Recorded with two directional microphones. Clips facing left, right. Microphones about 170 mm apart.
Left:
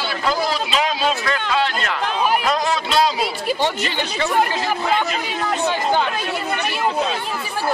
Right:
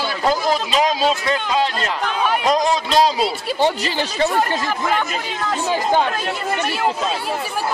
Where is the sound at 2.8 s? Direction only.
40° right (ahead or behind).